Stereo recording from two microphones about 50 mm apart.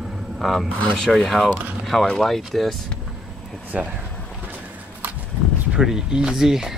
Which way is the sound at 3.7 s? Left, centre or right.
Right.